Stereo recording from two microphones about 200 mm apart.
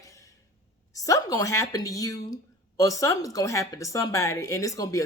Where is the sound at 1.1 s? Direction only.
15° left (ahead or behind).